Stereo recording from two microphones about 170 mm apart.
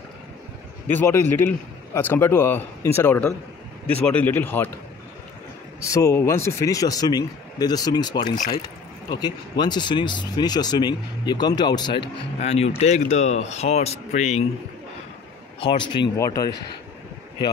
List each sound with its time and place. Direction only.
0.8 s a man's voice: 15° left (ahead or behind)
5.8 s speech: 15° left (ahead or behind)
12.4 s speech: 40° left (ahead or behind)
15.7 s speech: 25° left (ahead or behind)